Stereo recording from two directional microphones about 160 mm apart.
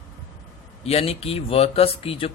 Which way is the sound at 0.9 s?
40° left (ahead or behind).